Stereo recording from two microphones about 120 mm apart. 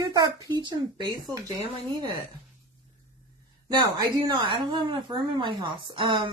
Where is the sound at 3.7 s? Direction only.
40° right (ahead or behind).